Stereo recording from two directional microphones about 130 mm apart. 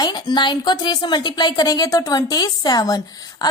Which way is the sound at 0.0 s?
35° left (ahead or behind).